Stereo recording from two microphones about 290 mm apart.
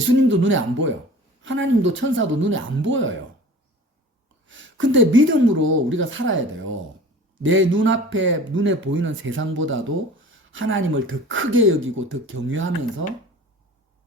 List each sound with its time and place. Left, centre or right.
0.3 s speech: right
4.4 s speech: right